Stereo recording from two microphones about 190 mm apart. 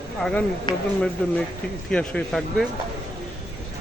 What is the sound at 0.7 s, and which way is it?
Speech, 25° left (ahead or behind).